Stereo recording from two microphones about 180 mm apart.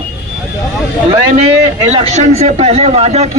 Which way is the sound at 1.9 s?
35° right (ahead or behind).